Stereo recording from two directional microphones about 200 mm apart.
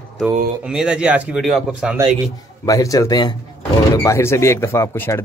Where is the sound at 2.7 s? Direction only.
15° left (ahead or behind).